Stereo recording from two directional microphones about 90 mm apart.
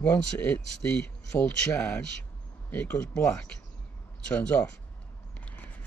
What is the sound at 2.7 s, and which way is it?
Speech, 15° left (ahead or behind).